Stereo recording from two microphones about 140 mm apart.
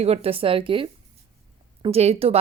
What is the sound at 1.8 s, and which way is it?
Speech, 45° right (ahead or behind).